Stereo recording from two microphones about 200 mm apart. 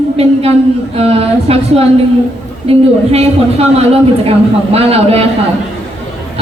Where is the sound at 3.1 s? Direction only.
30° right (ahead or behind).